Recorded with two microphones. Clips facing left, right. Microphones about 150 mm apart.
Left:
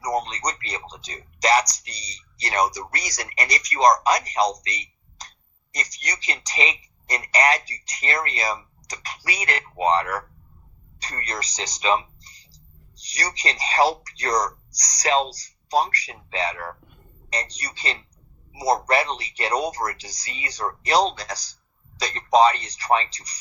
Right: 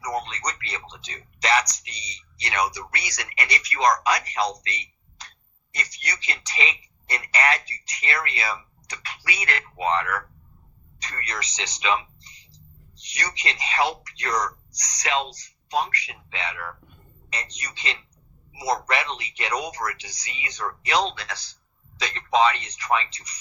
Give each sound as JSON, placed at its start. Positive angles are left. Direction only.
{"t": 0.0, "sound": "speech", "side_deg": 40}